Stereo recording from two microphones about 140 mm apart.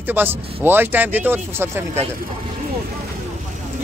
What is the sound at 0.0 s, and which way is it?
Speech, 15° right (ahead or behind).